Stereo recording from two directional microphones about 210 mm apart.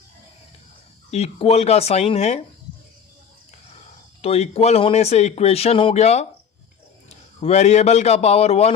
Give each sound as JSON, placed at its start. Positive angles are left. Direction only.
{"t": 1.1, "sound": "speech", "side_deg": 30}
{"t": 4.2, "sound": "speech", "side_deg": 30}
{"t": 7.4, "sound": "speech", "side_deg": 30}